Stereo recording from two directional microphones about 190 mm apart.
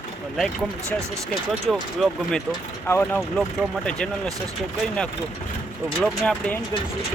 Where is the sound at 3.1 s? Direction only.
Centre (ahead or behind).